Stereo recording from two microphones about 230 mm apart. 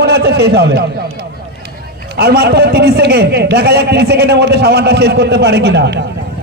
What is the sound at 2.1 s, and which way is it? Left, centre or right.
Speech, right.